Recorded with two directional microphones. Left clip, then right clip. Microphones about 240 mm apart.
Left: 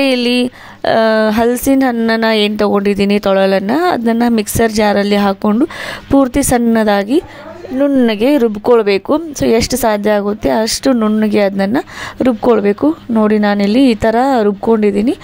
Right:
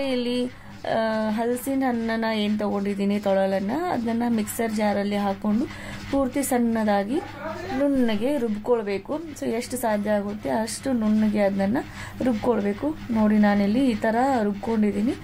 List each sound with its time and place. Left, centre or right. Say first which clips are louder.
0.0 s speech: left 13 dB; left